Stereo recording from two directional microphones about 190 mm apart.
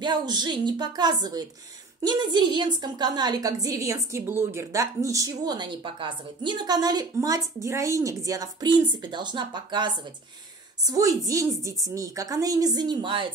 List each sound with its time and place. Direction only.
0.0 s a woman's voice: 25° right (ahead or behind)